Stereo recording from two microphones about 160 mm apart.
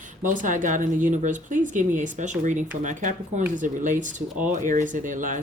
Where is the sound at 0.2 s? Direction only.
55° right (ahead or behind).